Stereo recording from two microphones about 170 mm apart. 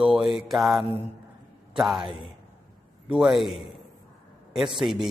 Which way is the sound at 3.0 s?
5° right (ahead or behind).